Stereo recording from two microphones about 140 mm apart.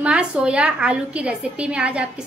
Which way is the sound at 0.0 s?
10° right (ahead or behind).